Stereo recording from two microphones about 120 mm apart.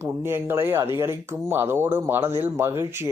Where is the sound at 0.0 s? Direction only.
20° right (ahead or behind).